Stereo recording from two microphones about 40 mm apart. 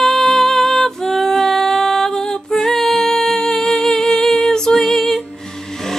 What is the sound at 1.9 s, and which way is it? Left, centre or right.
Music, centre.